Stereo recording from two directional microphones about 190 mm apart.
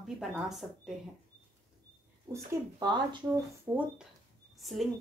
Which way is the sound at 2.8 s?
20° right (ahead or behind).